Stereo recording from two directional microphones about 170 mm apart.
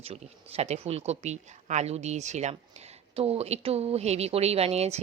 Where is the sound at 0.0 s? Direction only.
35° right (ahead or behind).